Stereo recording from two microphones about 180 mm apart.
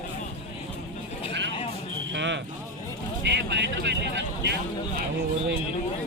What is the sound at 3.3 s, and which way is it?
Vehicle, 75° right (ahead or behind).